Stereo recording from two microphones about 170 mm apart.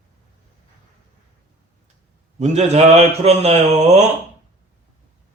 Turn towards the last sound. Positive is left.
turn(degrees=-40)  # may be behind; listen again after turning